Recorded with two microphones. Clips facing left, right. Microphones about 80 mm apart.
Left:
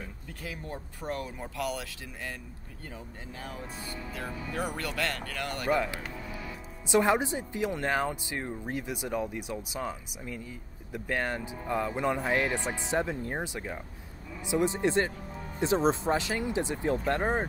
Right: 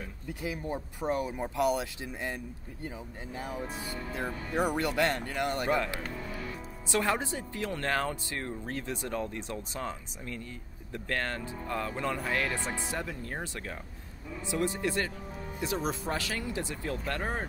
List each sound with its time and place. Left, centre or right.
0.3 s speech: centre
3.3 s speech: centre
6.9 s speech: centre